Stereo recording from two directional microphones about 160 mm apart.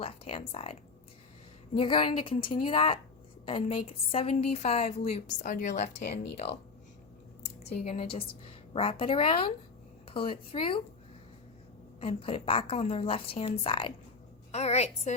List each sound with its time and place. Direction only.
0.0 s speech: 35° left (ahead or behind)
1.8 s a woman's voice: 35° left (ahead or behind)
7.9 s a woman's voice: 35° left (ahead or behind)
11.9 s a woman's voice: 35° left (ahead or behind)